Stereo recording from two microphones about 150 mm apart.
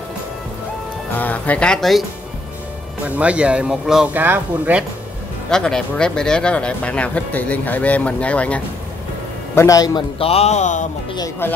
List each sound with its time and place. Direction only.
1.1 s speech: 10° left (ahead or behind)
3.2 s speech: 10° right (ahead or behind)
5.5 s speech: 5° left (ahead or behind)
9.6 s a man's voice: 25° left (ahead or behind)
10.1 s speech: 40° left (ahead or behind)
11.1 s a man's voice: 20° left (ahead or behind)